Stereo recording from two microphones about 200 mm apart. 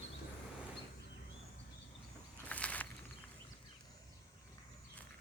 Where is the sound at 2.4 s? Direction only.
5° left (ahead or behind).